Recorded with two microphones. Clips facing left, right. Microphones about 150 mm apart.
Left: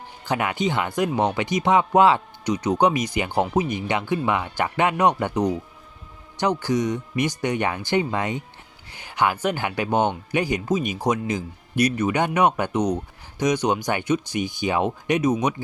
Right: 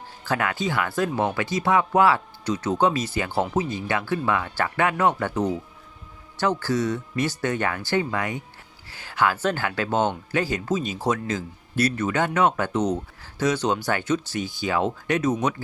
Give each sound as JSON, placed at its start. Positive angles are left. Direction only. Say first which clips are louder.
{"t": 0.3, "sound": "speech", "louder": "left 2 dB", "side_deg": 20}